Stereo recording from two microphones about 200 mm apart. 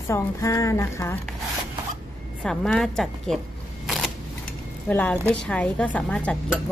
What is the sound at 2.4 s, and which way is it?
Speech, centre (ahead or behind).